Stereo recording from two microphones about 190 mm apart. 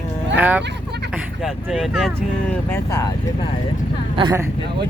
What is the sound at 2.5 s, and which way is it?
Speech, 15° left (ahead or behind).